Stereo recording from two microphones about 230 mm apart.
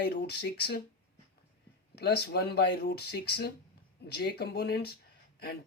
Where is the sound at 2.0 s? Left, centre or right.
Left.